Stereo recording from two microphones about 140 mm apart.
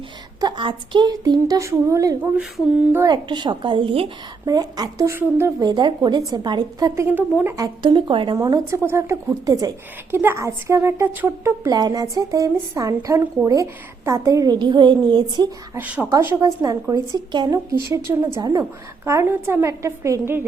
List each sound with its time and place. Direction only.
0.3 s a woman's voice: 30° right (ahead or behind)
4.4 s a woman's voice: 30° right (ahead or behind)
5.6 s a woman's voice: 30° right (ahead or behind); by 7.5 s 15° right (ahead or behind)
7.5 s a woman's voice: 30° right (ahead or behind)
8.4 s a woman's voice: 25° right (ahead or behind)
15.7 s a woman's voice: 10° right (ahead or behind)